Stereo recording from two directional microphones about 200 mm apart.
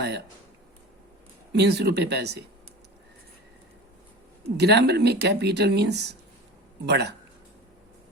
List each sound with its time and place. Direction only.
1.5 s speech: 55° right (ahead or behind)
4.5 s speech: 55° right (ahead or behind)